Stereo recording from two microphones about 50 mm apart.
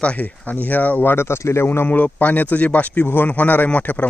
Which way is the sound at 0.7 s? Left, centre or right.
Left.